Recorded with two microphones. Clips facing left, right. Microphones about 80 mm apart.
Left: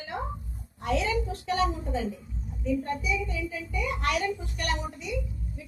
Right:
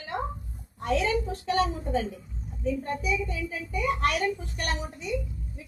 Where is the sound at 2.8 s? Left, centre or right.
Right.